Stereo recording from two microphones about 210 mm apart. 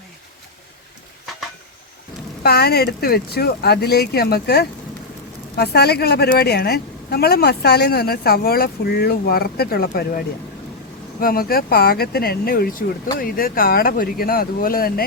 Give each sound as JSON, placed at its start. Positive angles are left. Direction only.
{"t": 2.4, "sound": "a woman's voice", "side_deg": 50}